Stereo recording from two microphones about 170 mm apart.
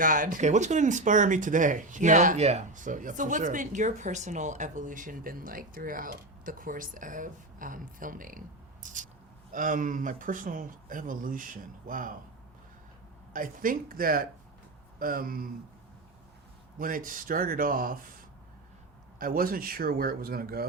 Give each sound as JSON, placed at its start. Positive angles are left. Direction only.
{"t": 0.0, "sound": "speech", "side_deg": -50}
{"t": 13.3, "sound": "a man's voice", "side_deg": -55}
{"t": 16.7, "sound": "a man's voice", "side_deg": -55}
{"t": 19.2, "sound": "a man's voice", "side_deg": -60}